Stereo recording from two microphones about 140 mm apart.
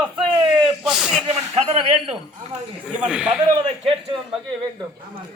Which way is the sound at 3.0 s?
5° right (ahead or behind).